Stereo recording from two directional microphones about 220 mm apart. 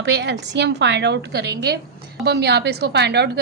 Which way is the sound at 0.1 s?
50° right (ahead or behind).